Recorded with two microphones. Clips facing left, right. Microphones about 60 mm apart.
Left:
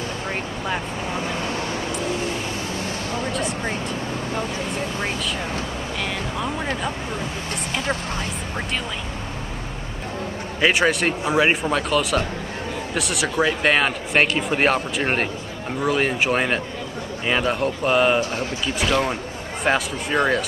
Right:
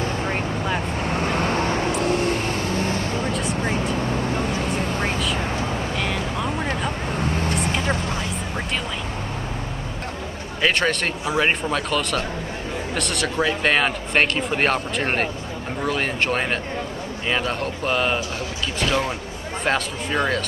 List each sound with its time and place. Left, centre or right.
1.0 s vehicle: right
1.9 s vehicle: right
3.3 s speech: centre
5.9 s speech: centre
10.6 s speech: centre